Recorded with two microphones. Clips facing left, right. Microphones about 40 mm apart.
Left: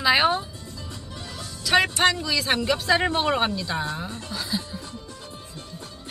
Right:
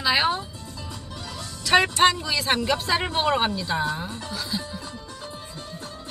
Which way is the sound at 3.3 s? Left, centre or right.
Centre.